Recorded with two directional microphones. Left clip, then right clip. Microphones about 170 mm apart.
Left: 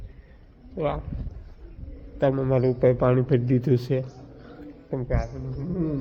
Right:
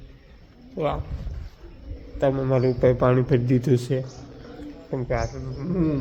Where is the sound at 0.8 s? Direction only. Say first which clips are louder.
Right 1 dB; 10° left (ahead or behind).